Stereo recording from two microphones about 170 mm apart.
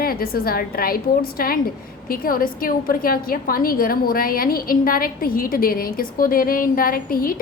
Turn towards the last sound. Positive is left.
turn(degrees=55)  # may be behind; listen again after turning